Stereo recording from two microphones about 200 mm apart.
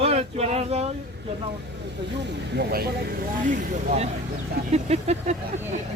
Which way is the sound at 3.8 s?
35° right (ahead or behind).